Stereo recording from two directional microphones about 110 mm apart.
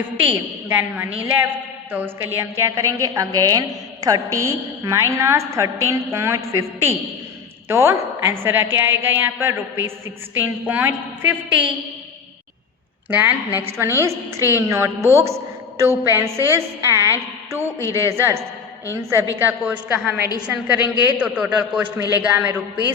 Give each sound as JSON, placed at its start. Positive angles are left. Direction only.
{"t": 0.7, "sound": "a woman's voice", "side_deg": -20}
{"t": 13.1, "sound": "a woman's voice", "side_deg": -15}